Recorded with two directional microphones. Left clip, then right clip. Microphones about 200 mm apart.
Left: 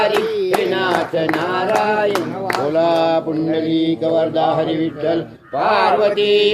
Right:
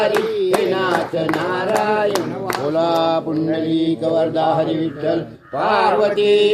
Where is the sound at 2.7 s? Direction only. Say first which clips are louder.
Left 1 dB; 20° right (ahead or behind).